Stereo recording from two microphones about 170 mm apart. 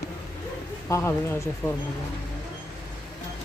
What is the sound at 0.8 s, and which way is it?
Speech, 15° left (ahead or behind).